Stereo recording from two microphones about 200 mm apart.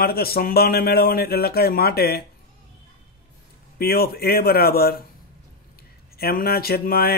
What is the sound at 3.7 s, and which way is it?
A man's voice, 50° left (ahead or behind).